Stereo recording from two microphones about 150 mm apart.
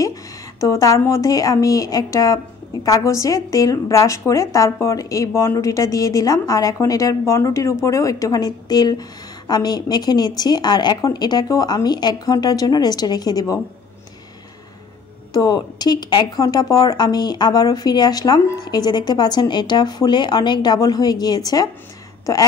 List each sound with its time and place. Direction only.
0.0 s a woman's voice: 20° left (ahead or behind)
15.3 s a woman's voice: 25° left (ahead or behind)